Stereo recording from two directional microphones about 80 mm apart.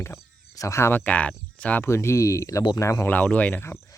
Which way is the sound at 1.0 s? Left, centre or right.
Centre.